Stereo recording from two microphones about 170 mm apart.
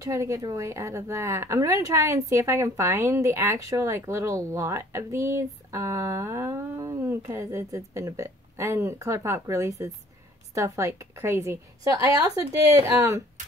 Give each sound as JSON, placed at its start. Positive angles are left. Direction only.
{"t": 0.0, "sound": "speech", "side_deg": -15}